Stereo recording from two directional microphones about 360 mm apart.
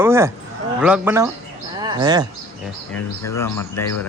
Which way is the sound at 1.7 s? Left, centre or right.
Centre.